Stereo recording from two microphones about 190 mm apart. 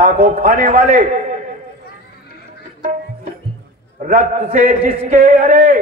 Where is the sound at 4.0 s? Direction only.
45° right (ahead or behind).